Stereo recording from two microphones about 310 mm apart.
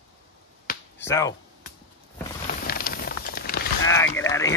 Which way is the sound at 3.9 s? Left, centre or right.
Centre.